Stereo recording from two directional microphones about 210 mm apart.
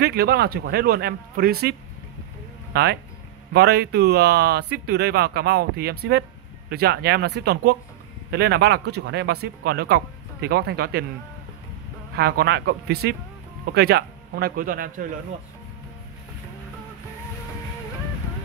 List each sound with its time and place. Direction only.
0.0 s speech: 50° right (ahead or behind)
12.2 s speech: 50° right (ahead or behind)